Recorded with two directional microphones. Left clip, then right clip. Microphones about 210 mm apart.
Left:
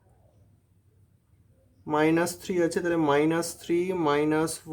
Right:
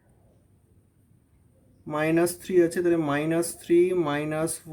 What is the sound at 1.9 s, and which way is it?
Speech, 30° left (ahead or behind).